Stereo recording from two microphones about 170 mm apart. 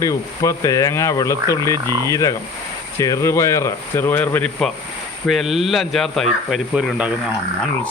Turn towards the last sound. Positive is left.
turn(degrees=-5)  # may be behind; listen again after turning